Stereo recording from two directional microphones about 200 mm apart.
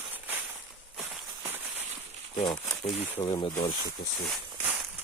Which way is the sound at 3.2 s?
20° left (ahead or behind).